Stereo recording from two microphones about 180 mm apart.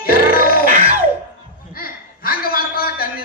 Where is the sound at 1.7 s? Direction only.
55° left (ahead or behind).